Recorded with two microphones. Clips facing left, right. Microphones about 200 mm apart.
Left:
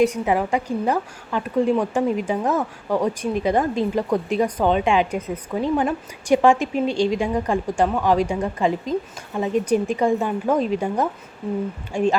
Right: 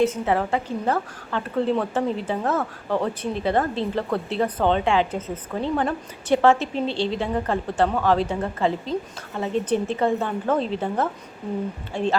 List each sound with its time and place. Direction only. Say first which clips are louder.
0.0 s speech: left 2 dB; 15° left (ahead or behind)